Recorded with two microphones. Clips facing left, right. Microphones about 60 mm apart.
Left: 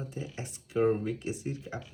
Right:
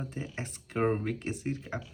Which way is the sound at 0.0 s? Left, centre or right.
Right.